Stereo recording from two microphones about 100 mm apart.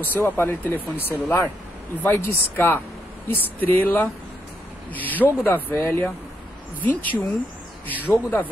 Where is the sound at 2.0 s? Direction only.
25° left (ahead or behind).